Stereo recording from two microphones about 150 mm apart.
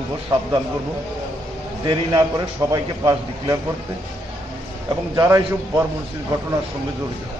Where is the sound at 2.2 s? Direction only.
20° right (ahead or behind).